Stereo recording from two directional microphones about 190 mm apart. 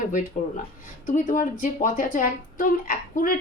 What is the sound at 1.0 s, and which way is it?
A woman's voice, 45° left (ahead or behind).